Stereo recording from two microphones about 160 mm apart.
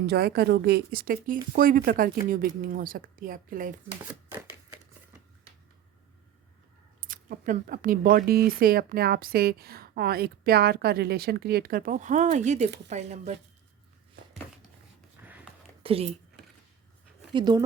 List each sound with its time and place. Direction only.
0.0 s speech: 90° right; by 3.8 s 55° right (ahead or behind)
7.0 s speech: 60° right (ahead or behind)
15.2 s a sound: 10° right (ahead or behind)
15.8 s speech: 35° right (ahead or behind)
17.3 s speech: 25° right (ahead or behind)